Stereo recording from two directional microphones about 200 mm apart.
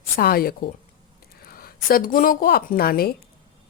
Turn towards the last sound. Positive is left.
turn(degrees=50)  # may be behind; listen again after turning